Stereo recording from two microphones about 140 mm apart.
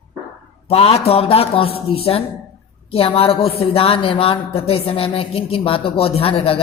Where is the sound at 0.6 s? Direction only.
45° left (ahead or behind).